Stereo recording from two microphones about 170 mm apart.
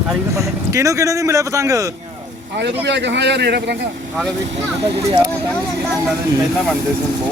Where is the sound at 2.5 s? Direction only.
90° right.